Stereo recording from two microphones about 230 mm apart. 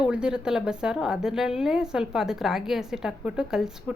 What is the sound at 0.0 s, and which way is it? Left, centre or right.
A woman's voice, centre.